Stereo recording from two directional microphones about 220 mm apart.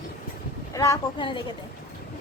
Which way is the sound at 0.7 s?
15° left (ahead or behind).